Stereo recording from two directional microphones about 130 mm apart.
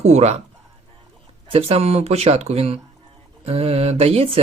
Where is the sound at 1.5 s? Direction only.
50° right (ahead or behind).